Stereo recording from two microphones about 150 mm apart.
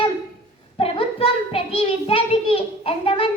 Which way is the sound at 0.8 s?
40° left (ahead or behind).